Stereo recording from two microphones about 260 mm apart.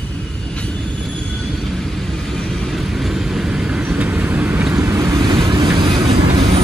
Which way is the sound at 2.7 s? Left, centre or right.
Centre.